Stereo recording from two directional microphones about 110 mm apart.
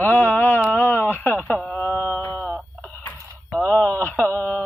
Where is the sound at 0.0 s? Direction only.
15° left (ahead or behind).